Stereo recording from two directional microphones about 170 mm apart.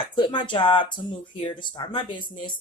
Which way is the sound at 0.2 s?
30° left (ahead or behind).